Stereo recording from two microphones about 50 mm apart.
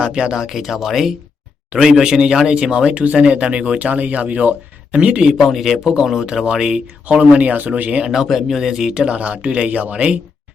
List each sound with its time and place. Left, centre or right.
0.0 s speech: centre
5.3 s speech: centre
7.0 s speech: right
8.1 s speech: centre; by 10.2 s right